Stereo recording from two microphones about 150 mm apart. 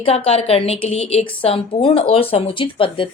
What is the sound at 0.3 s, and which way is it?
A woman's voice, 40° left (ahead or behind).